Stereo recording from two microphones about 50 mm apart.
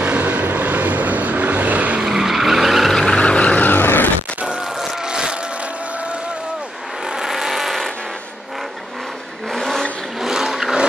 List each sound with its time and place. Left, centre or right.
0.0 s vehicle: right
2.0 s vehicle: centre
2.9 s vehicle: centre
3.2 s vehicle: left
4.5 s vehicle: centre
7.2 s vehicle: centre
9.5 s vehicle: centre
10.2 s vehicle: centre